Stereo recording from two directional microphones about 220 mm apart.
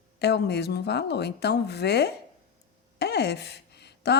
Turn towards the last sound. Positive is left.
turn(degrees=50)  # may be behind; listen again after turning